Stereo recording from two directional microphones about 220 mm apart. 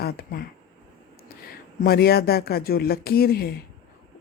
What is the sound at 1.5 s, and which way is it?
Speech, 45° left (ahead or behind).